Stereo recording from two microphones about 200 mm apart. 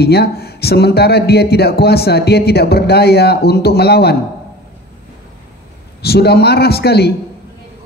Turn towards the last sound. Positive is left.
turn(degrees=55)  # may be behind; listen again after turning